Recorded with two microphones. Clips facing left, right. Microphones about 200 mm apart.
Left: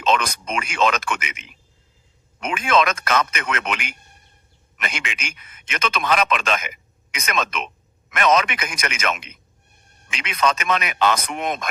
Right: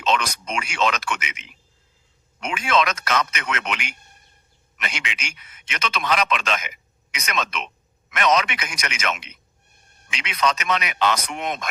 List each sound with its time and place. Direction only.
0.0 s a man's voice: 50° left (ahead or behind)